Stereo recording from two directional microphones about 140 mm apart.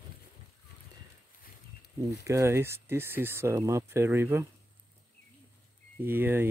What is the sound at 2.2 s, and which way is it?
Speech, 20° right (ahead or behind).